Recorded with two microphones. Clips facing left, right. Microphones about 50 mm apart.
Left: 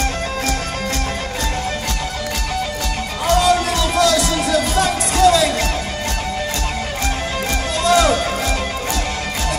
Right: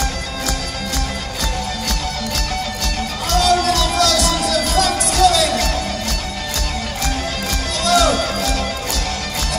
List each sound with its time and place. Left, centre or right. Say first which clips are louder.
3.3 s music: left 1 dB; centre
7.8 s music: left 1 dB; left